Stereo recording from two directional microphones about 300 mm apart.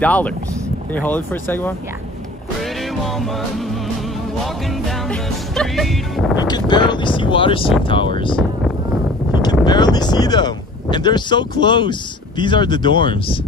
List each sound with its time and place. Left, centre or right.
0.0 s music: centre
0.9 s speech: centre
2.6 s music: centre
6.4 s speech: centre
9.7 s speech: centre